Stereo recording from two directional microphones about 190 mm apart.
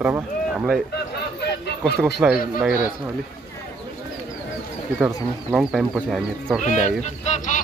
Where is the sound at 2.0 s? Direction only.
Centre (ahead or behind).